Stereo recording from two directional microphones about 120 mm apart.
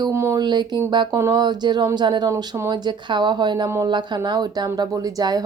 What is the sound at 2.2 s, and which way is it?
Speech, 25° right (ahead or behind).